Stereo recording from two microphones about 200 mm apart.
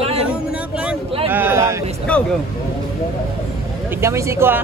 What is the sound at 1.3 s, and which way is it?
Speech, 10° right (ahead or behind).